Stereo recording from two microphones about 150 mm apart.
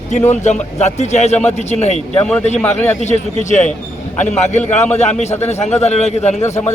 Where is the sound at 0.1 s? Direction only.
50° left (ahead or behind).